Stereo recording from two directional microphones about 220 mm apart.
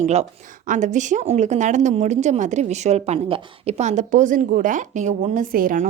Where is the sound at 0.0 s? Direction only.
30° right (ahead or behind).